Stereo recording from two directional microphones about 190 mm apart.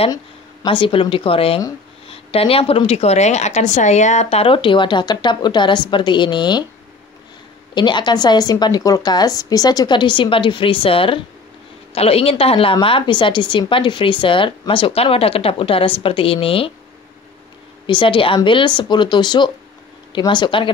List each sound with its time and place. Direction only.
0.1 s a woman's voice: 20° left (ahead or behind)
7.7 s a woman's voice: 25° left (ahead or behind)
17.8 s a woman's voice: 25° left (ahead or behind)